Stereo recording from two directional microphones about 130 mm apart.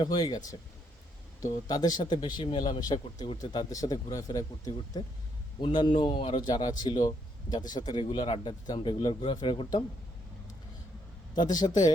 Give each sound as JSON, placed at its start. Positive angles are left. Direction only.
{"t": 0.0, "sound": "speech", "side_deg": 30}
{"t": 11.6, "sound": "speech", "side_deg": 45}